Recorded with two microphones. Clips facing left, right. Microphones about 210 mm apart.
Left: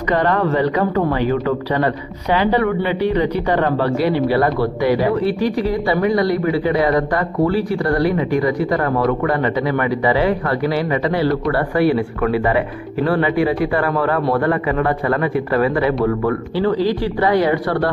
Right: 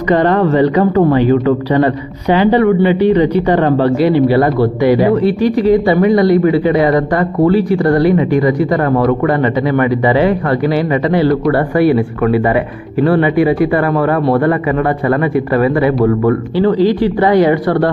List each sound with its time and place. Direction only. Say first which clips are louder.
0.1 s speech: right 6 dB; 25° right (ahead or behind)
3.4 s speech: right 6 dB; 25° right (ahead or behind)
5.2 s speech: right 6 dB; 20° right (ahead or behind)
13.1 s speech: right 5 dB; 15° right (ahead or behind)
16.3 s speech: right 6 dB; 20° right (ahead or behind)